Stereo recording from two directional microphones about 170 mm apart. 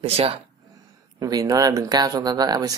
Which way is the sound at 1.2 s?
20° right (ahead or behind).